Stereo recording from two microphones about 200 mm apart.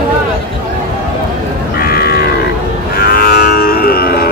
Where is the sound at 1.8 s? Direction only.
50° left (ahead or behind).